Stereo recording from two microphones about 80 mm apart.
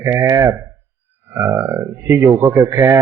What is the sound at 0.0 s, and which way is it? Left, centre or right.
Speech, right.